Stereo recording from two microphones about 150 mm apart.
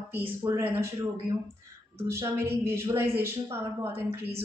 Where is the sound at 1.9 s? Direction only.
20° right (ahead or behind).